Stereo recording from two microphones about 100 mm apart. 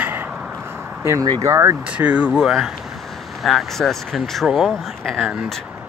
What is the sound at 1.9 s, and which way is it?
Speech, 15° right (ahead or behind).